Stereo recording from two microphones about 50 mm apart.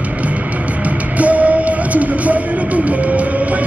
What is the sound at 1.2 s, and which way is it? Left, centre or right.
Music, right.